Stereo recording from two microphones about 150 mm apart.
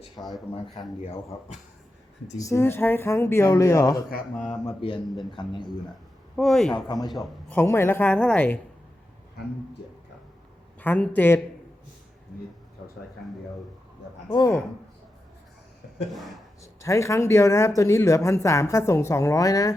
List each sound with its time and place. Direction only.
0.2 s speech: centre (ahead or behind)
2.4 s speech: 20° left (ahead or behind)
4.8 s a man's voice: 40° left (ahead or behind)
6.3 s speech: 5° left (ahead or behind)
6.7 s speech: 30° left (ahead or behind)
7.5 s speech: 15° left (ahead or behind)
10.8 s speech: 10° left (ahead or behind)
14.3 s speech: 25° left (ahead or behind)
16.1 s speech: centre (ahead or behind)
16.8 s speech: 20° left (ahead or behind)